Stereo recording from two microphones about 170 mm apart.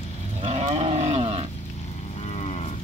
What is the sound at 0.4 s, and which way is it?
Cattle, 40° right (ahead or behind).